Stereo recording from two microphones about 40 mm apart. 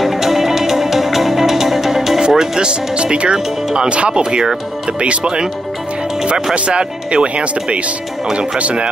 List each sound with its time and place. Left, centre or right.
0.0 s music: centre
2.2 s speech: centre
6.5 s speech: right